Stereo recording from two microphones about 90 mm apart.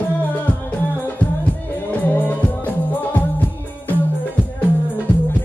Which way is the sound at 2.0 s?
20° left (ahead or behind).